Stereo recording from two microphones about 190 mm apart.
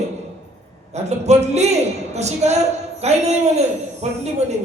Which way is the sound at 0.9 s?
35° right (ahead or behind).